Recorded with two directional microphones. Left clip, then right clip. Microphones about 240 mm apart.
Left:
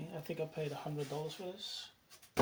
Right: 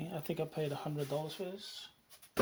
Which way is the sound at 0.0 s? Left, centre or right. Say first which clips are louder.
Right 2 dB; right.